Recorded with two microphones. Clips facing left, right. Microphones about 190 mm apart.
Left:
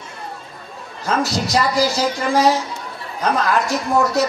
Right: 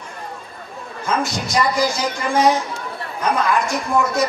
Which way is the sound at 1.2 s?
40° left (ahead or behind).